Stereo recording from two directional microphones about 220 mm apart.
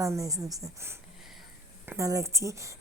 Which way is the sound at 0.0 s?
15° right (ahead or behind).